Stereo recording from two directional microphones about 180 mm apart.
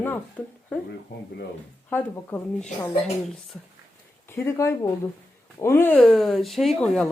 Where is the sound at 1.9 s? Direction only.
10° left (ahead or behind).